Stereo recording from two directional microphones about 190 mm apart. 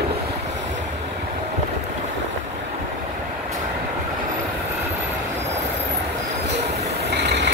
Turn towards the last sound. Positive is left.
turn(degrees=-65)  # may be behind; listen again after turning